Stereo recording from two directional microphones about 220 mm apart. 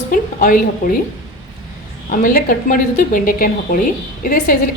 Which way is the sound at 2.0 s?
40° left (ahead or behind).